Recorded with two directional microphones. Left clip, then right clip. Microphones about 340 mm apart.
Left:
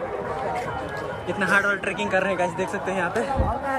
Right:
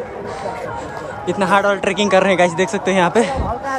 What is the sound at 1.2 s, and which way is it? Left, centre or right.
Speech, centre.